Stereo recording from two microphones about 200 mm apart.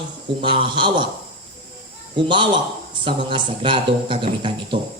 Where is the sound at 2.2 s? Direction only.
25° right (ahead or behind).